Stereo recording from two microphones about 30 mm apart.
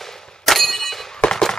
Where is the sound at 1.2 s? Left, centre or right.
Left.